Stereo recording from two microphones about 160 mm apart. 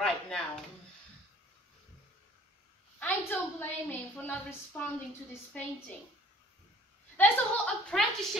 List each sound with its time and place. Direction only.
0.0 s a sound: centre (ahead or behind)
3.0 s a woman's voice: 10° left (ahead or behind)
7.2 s a woman's voice: 10° left (ahead or behind)